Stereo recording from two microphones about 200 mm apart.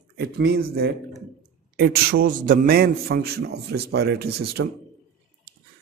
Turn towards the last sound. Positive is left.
turn(degrees=-55)  # may be behind; listen again after turning